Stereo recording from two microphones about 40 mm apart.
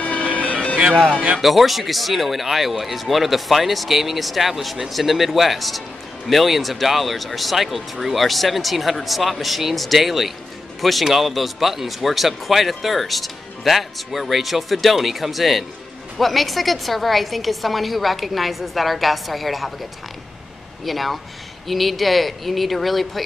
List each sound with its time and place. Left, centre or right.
0.0 s music: left
0.7 s speech: right
1.4 s speech: centre
20.8 s speech: centre